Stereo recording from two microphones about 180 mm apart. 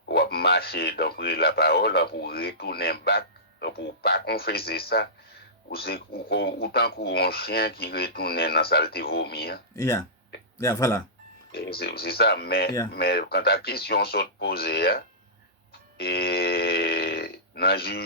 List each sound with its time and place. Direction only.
0.1 s speech: 60° left (ahead or behind)
9.7 s speech: 15° left (ahead or behind)
11.5 s speech: 60° left (ahead or behind)
16.0 s burping: 60° left (ahead or behind)